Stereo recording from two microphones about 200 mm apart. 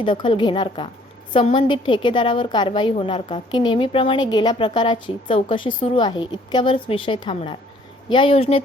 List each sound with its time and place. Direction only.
0.0 s a woman's voice: 25° left (ahead or behind)